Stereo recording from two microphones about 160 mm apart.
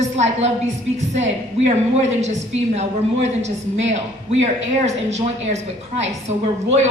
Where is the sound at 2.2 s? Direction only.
45° right (ahead or behind).